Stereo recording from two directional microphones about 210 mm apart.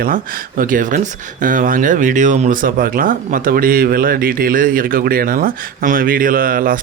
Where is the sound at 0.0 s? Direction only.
40° right (ahead or behind).